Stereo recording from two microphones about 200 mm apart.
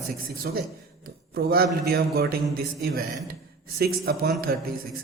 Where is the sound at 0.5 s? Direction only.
45° right (ahead or behind).